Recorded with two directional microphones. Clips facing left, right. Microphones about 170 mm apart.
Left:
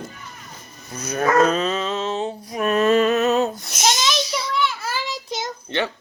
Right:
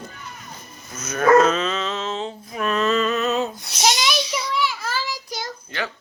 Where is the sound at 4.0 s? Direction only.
10° right (ahead or behind).